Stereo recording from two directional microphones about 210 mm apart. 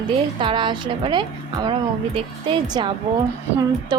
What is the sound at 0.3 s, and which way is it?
A woman's voice, 25° right (ahead or behind).